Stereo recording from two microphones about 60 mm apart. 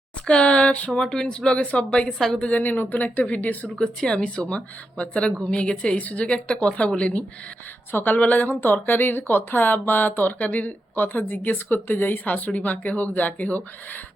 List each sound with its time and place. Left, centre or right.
0.3 s speech: centre
2.1 s a woman's voice: centre
2.4 s a woman's voice: left
3.8 s a woman's voice: centre